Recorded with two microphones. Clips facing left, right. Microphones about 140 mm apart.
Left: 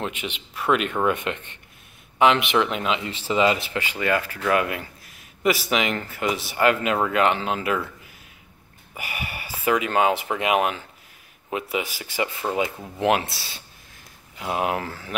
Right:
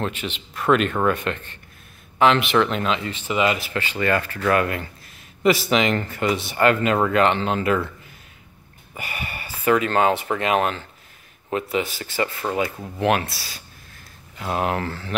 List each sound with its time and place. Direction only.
0.0 s a man's voice: 15° left (ahead or behind)
3.1 s speech: 30° left (ahead or behind)
3.7 s a man's voice: 10° left (ahead or behind)
8.9 s a man's voice: 10° left (ahead or behind)
14.4 s a man's voice: 10° left (ahead or behind)